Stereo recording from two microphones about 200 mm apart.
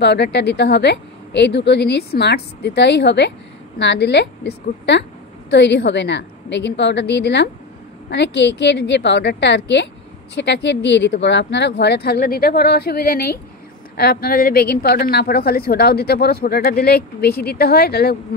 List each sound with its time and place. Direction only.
0.0 s a woman's voice: 60° left (ahead or behind)